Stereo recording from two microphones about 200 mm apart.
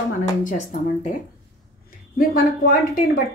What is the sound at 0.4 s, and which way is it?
Speech, 40° left (ahead or behind).